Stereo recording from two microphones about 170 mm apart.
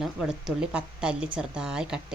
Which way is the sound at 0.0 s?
5° right (ahead or behind).